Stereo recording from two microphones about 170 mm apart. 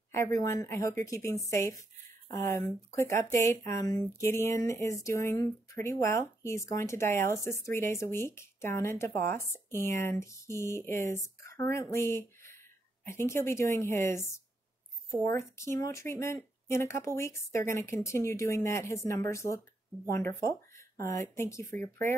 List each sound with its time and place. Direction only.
0.1 s speech: 20° left (ahead or behind)